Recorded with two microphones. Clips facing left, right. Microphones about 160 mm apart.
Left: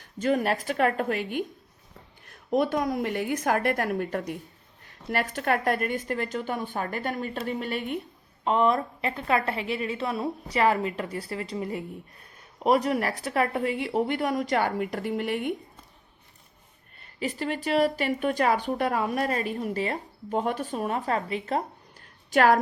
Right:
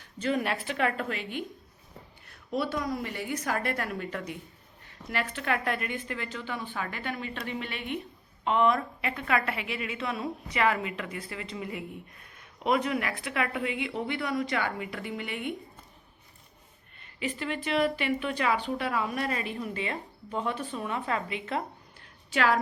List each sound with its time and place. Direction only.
0.0 s a woman's voice: 45° left (ahead or behind)
17.2 s speech: 40° left (ahead or behind)
22.3 s a woman's voice: 50° left (ahead or behind)